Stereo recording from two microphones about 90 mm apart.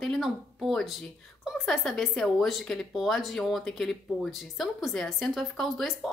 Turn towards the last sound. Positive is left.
turn(degrees=0)  # may be behind; listen again after turning